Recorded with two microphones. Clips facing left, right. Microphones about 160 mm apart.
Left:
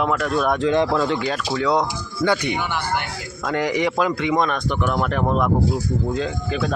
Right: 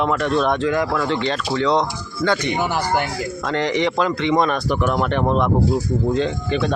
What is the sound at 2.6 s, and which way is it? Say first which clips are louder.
Speech: right 4 dB; 40° right (ahead or behind).